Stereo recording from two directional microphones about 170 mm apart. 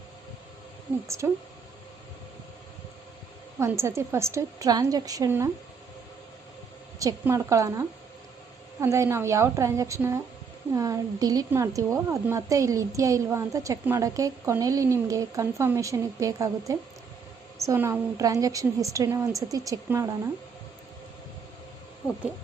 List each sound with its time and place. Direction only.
1.0 s a woman's voice: 15° right (ahead or behind)
3.6 s a woman's voice: 15° right (ahead or behind)
7.0 s a woman's voice: 20° right (ahead or behind)